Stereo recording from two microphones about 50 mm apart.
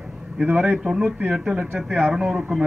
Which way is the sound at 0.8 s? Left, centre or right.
Centre.